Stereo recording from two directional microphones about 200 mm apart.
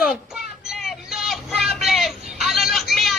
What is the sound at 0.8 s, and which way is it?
Vehicle, centre (ahead or behind).